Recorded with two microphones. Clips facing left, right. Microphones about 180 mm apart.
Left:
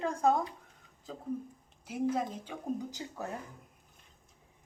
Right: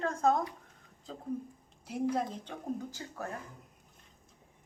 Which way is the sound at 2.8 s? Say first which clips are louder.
Left 1 dB; 15° left (ahead or behind).